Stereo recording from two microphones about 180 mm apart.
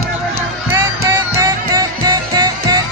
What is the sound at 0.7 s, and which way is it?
Music, 15° right (ahead or behind).